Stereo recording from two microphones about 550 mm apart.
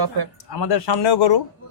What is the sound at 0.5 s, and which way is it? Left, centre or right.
Speech, left.